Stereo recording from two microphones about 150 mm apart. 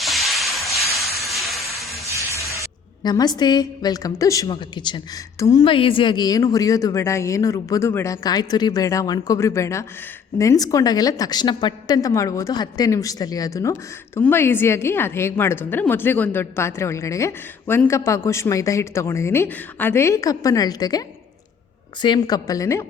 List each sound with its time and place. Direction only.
0.0 s hiss: centre (ahead or behind)
2.4 s a woman's voice: 25° left (ahead or behind)
5.6 s a woman's voice: 35° left (ahead or behind)
22.0 s speech: 30° left (ahead or behind)